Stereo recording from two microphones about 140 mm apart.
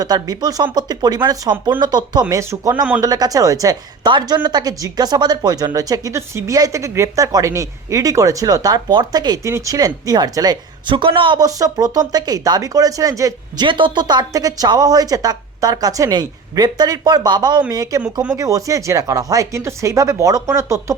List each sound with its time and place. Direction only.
0.0 s a woman's voice: 30° right (ahead or behind)
18.0 s speech: 10° right (ahead or behind)
18.3 s a woman's voice: 25° right (ahead or behind)